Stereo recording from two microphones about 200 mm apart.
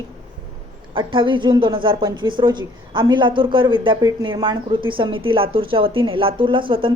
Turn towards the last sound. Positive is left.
turn(degrees=-25)  # may be behind; listen again after turning